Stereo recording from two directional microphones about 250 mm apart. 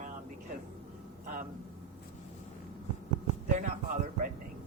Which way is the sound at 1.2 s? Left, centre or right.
Right.